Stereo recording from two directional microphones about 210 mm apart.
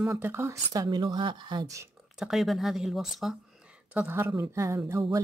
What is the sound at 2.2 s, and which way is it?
Speech, centre (ahead or behind).